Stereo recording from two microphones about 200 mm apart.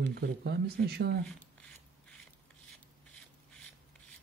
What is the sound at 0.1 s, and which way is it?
Speech, 55° right (ahead or behind).